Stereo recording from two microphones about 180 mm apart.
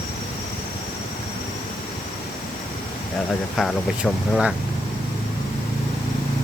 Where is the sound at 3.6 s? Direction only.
Centre (ahead or behind).